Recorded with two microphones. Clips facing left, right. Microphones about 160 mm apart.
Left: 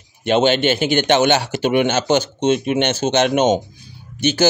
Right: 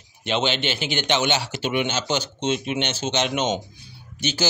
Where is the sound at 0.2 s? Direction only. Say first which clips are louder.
Left 9 dB; 50° left (ahead or behind).